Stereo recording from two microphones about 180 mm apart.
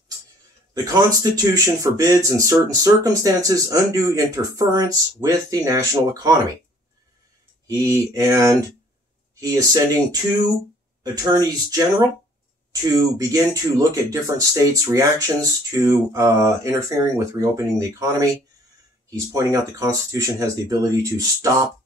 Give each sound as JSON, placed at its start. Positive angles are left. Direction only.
{"t": 0.8, "sound": "speech", "side_deg": -20}
{"t": 7.6, "sound": "speech", "side_deg": -20}
{"t": 11.3, "sound": "speech", "side_deg": -20}
{"t": 13.3, "sound": "speech", "side_deg": -20}